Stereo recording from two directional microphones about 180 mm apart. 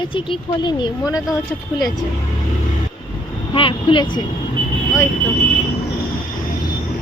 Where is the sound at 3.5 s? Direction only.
30° left (ahead or behind).